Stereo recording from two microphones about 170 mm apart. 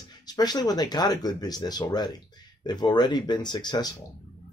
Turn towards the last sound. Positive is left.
turn(degrees=25)  # may be behind; listen again after turning